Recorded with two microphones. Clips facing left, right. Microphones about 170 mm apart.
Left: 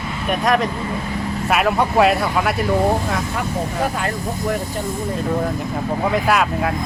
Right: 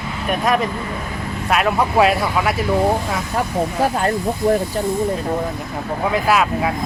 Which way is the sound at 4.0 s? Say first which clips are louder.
Right 4 dB; 35° right (ahead or behind).